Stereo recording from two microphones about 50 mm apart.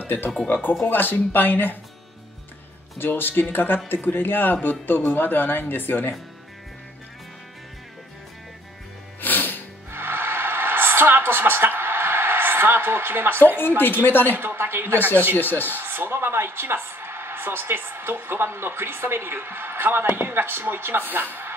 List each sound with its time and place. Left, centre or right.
0.0 s speech: left
3.0 s a man's voice: left
9.2 s music: left
9.8 s music: right
13.6 s a man's voice: left
14.3 s speech: right
15.0 s speech: left
15.7 s speech: right